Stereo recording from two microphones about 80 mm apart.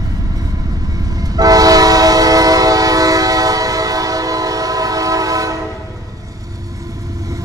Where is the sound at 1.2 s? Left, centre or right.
Right.